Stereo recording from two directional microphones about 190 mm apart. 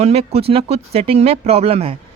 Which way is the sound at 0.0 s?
35° right (ahead or behind).